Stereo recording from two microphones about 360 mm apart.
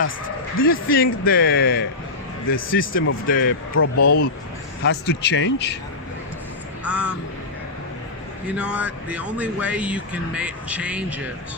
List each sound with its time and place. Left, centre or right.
0.6 s speech: left
3.9 s speech: left
4.8 s speech: left
6.8 s speech: centre
8.4 s speech: centre